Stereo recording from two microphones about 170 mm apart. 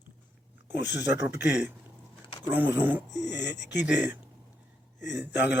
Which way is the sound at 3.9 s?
10° right (ahead or behind).